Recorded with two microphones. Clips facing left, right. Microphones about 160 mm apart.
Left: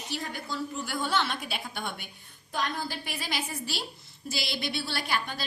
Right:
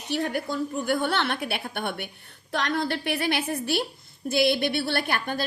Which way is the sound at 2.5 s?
75° right (ahead or behind).